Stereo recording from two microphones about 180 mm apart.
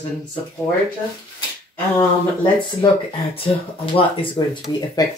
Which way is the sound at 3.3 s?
30° left (ahead or behind).